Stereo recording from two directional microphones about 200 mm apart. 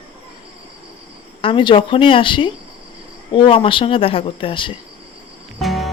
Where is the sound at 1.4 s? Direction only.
25° left (ahead or behind).